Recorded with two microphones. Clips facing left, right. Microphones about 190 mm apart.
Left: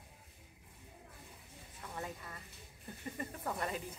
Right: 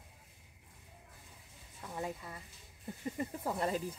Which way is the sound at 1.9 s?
20° right (ahead or behind).